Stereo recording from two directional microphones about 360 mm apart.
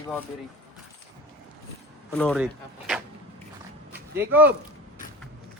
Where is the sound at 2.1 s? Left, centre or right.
Centre.